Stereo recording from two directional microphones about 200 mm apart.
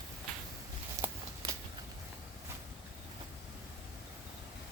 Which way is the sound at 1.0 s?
10° right (ahead or behind).